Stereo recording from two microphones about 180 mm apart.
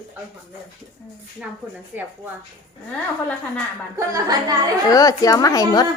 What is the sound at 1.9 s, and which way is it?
Speech, 10° right (ahead or behind).